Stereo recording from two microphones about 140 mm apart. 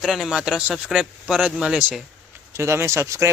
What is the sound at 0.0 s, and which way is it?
Speech, centre (ahead or behind).